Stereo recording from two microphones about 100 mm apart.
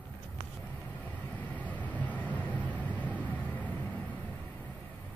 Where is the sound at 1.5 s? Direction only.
15° left (ahead or behind).